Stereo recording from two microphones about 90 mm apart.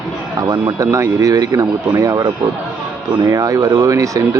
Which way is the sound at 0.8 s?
35° right (ahead or behind).